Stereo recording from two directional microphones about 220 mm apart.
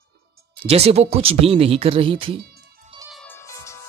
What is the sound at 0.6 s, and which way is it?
Speech, 25° right (ahead or behind).